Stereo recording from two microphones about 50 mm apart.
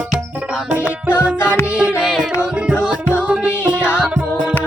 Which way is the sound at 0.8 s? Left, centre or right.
Left.